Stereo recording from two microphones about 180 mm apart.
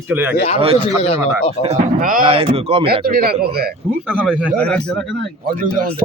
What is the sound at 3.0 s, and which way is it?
Speech, 55° right (ahead or behind).